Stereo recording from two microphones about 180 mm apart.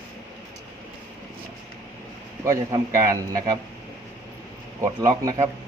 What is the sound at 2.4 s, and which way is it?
A man's voice, 15° right (ahead or behind).